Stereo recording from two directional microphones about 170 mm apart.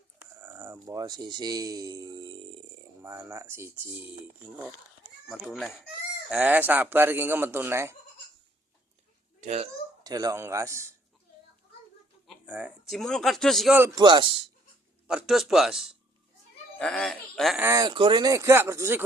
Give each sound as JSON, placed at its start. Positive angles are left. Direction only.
{"t": 0.4, "sound": "speech", "side_deg": -15}
{"t": 3.0, "sound": "speech", "side_deg": -15}
{"t": 5.3, "sound": "speech", "side_deg": 0}
{"t": 9.4, "sound": "a child's voice", "side_deg": -40}
{"t": 10.0, "sound": "speech", "side_deg": -20}
{"t": 12.5, "sound": "speech", "side_deg": -10}
{"t": 12.9, "sound": "speech", "side_deg": 5}
{"t": 13.7, "sound": "speech", "side_deg": -20}
{"t": 15.0, "sound": "speech", "side_deg": -5}
{"t": 17.6, "sound": "speech", "side_deg": -20}